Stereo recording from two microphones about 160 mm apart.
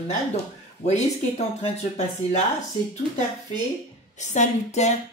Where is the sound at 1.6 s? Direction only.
45° left (ahead or behind).